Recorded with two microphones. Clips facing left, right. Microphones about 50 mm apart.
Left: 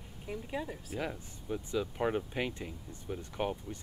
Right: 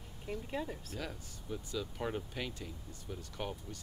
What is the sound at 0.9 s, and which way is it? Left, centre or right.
Speech, left.